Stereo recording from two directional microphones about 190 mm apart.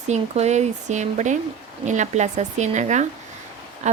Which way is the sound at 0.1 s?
35° right (ahead or behind).